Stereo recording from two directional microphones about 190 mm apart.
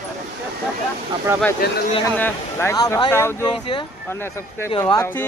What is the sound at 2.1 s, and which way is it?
Speech, 10° left (ahead or behind).